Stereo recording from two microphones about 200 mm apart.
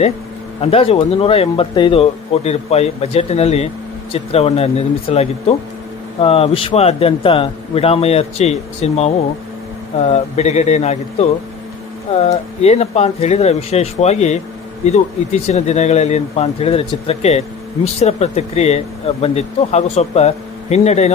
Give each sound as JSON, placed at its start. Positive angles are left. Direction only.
{"t": 0.6, "sound": "a man's voice", "side_deg": 30}